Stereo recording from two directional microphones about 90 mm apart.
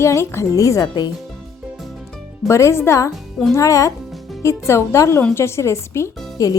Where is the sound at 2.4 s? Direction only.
30° left (ahead or behind).